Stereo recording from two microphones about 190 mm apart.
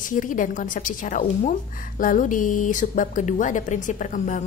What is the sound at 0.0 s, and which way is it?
A woman's voice, 45° left (ahead or behind).